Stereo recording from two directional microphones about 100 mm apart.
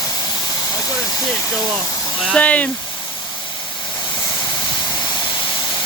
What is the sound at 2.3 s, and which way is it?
Speech, 15° left (ahead or behind).